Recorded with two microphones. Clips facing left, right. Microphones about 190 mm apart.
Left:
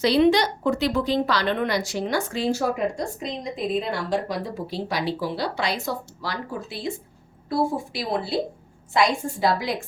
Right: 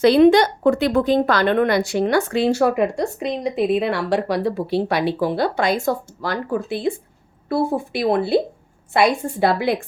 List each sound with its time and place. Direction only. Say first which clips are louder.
0.0 s a woman's voice: right 6 dB; 50° right (ahead or behind)